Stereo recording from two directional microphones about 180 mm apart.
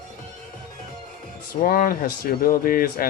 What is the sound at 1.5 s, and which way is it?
Speech, 55° left (ahead or behind).